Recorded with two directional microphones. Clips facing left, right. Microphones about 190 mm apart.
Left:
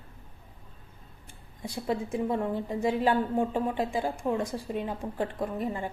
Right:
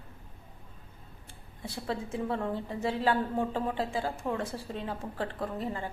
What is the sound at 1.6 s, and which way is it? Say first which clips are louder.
A woman's voice: left 4 dB; 15° left (ahead or behind).